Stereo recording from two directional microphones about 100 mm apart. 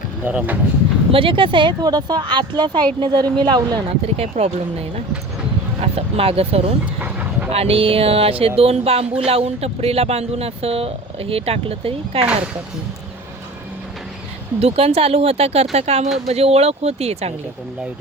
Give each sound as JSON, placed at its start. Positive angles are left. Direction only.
{"t": 0.3, "sound": "speech", "side_deg": -15}
{"t": 1.1, "sound": "speech", "side_deg": -60}
{"t": 3.8, "sound": "speech", "side_deg": -90}
{"t": 5.8, "sound": "speech", "side_deg": -80}
{"t": 6.8, "sound": "dog", "side_deg": -15}
{"t": 7.5, "sound": "speech", "side_deg": -80}
{"t": 14.6, "sound": "speech", "side_deg": -90}